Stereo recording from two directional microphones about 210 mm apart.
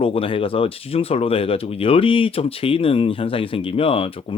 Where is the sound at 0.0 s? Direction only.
25° left (ahead or behind).